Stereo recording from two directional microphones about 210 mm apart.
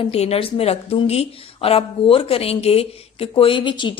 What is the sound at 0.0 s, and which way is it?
Speech, 30° left (ahead or behind).